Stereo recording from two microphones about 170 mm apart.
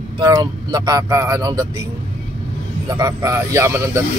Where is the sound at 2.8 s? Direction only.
20° right (ahead or behind).